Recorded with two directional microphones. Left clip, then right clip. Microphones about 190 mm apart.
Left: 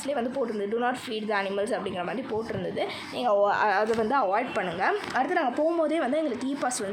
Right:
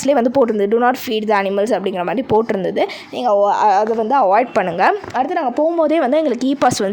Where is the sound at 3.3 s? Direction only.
30° right (ahead or behind).